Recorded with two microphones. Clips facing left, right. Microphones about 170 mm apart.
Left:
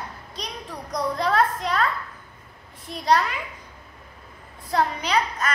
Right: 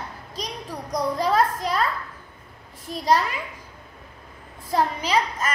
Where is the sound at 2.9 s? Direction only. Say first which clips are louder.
Right 3 dB; 35° right (ahead or behind).